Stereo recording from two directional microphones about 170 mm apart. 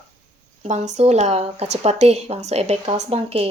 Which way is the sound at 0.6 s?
40° right (ahead or behind).